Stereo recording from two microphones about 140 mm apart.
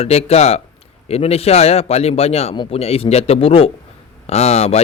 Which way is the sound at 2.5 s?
35° left (ahead or behind).